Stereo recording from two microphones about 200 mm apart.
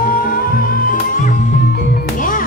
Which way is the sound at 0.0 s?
45° left (ahead or behind).